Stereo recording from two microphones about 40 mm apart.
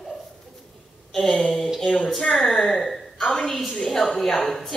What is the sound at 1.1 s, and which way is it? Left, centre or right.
A woman's voice, centre.